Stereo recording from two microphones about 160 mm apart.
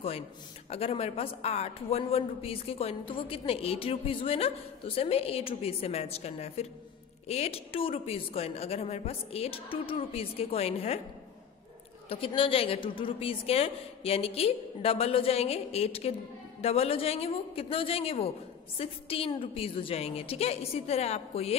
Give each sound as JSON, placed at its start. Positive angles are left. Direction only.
{"t": 0.7, "sound": "a man's voice", "side_deg": 35}
{"t": 12.1, "sound": "a man's voice", "side_deg": 35}